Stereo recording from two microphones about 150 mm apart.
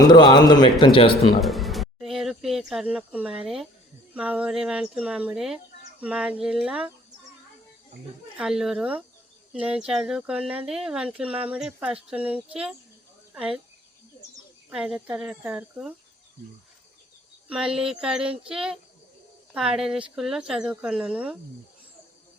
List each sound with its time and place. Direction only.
0.0 s speech: 30° left (ahead or behind)
1.4 s a sound: centre (ahead or behind)
4.1 s speech: 10° right (ahead or behind)
8.4 s speech: 5° right (ahead or behind)
14.7 s speech: 5° right (ahead or behind)
17.5 s speech: 5° right (ahead or behind)